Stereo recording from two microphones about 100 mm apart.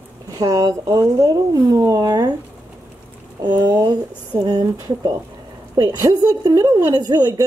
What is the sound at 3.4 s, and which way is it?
A woman's voice, 50° right (ahead or behind).